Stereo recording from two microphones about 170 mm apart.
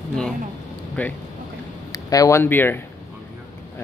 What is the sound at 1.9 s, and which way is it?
Speech, 20° left (ahead or behind).